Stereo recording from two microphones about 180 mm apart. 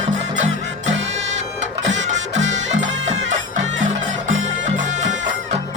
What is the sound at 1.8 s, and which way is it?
Music, 90° right.